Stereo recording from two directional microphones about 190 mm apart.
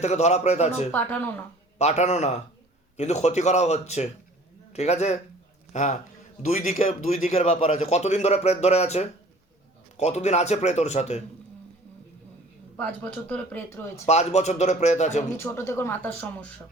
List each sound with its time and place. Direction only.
0.0 s a man's voice: 35° left (ahead or behind)
0.9 s speech: 10° left (ahead or behind)
1.8 s a man's voice: 35° left (ahead or behind)
12.7 s speech: 10° left (ahead or behind)
14.1 s a man's voice: 35° left (ahead or behind)
15.4 s speech: 15° left (ahead or behind)